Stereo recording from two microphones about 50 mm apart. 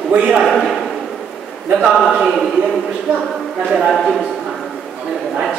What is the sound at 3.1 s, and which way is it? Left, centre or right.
Speech, centre.